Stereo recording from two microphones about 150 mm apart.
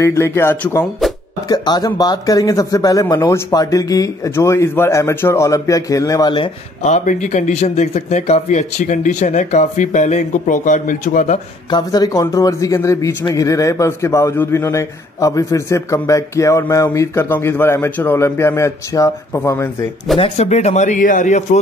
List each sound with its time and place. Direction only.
0.0 s speech: 20° left (ahead or behind)
1.5 s a man's voice: 25° left (ahead or behind)
6.8 s speech: 55° left (ahead or behind)
11.7 s a man's voice: 25° left (ahead or behind)
20.2 s speech: 45° left (ahead or behind)